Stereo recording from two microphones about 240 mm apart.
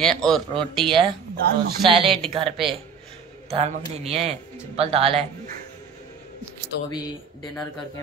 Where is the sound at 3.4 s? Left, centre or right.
Right.